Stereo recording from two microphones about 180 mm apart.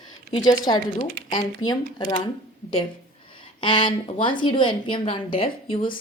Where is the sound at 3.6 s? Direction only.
25° left (ahead or behind).